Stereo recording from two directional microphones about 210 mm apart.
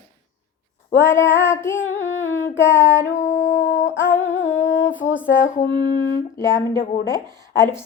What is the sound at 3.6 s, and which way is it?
Speech, 60° left (ahead or behind).